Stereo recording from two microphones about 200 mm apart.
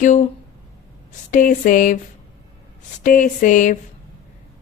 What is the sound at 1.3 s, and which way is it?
Speech, 40° left (ahead or behind).